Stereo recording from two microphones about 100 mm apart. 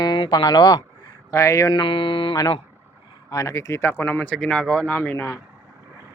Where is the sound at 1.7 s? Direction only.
55° left (ahead or behind).